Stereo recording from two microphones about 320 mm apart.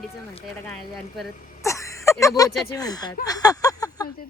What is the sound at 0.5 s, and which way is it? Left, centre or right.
Speech, centre.